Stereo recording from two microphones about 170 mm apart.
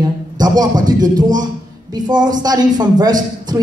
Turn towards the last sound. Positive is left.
turn(degrees=-25)  # may be behind; listen again after turning